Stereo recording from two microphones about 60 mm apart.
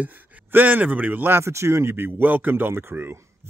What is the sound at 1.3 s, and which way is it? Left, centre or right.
Speech, right.